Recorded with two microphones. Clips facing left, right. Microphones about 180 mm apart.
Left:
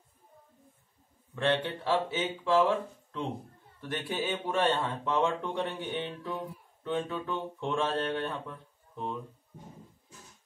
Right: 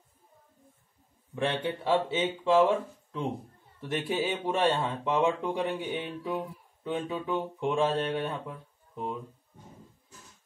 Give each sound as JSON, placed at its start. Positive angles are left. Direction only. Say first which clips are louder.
{"t": 1.3, "sound": "speech", "louder": "left 1 dB", "side_deg": -15}
{"t": 3.9, "sound": "speech", "louder": "right 3 dB", "side_deg": -15}